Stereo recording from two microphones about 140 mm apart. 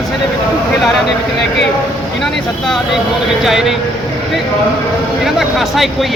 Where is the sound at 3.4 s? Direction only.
Centre (ahead or behind).